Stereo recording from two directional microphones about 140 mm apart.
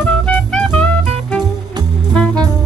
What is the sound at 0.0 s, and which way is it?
Music, 10° left (ahead or behind).